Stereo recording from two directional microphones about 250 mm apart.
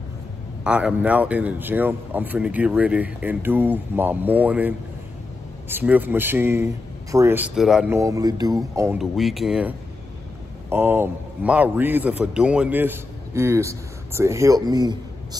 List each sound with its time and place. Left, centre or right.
0.7 s a man's voice: centre